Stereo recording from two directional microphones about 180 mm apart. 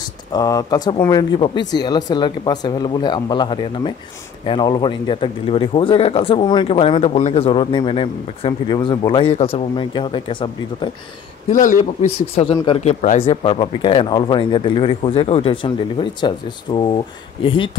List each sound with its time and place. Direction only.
0.3 s a man's voice: 20° left (ahead or behind)
11.5 s a man's voice: 45° left (ahead or behind); by 17.6 s 30° left (ahead or behind)